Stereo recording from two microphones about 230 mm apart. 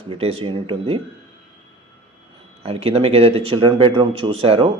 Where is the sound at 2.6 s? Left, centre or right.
Right.